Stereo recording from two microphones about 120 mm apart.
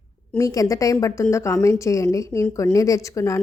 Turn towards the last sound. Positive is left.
turn(degrees=25)  # may be behind; listen again after turning